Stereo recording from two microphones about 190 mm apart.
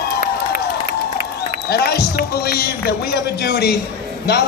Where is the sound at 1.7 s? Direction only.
55° left (ahead or behind).